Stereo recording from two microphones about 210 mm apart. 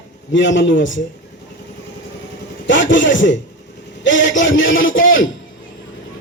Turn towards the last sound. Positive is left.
turn(degrees=65)  # may be behind; listen again after turning